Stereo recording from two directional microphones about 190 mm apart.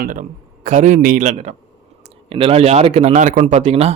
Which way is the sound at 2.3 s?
30° right (ahead or behind).